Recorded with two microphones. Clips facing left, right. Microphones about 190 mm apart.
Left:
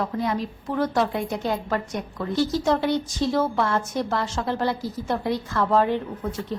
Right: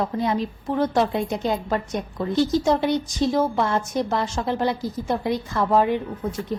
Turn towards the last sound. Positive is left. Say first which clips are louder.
# right 2 dB
turn(degrees=-15)  # may be behind; listen again after turning